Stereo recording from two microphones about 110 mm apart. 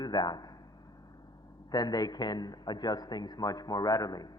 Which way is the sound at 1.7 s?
35° left (ahead or behind).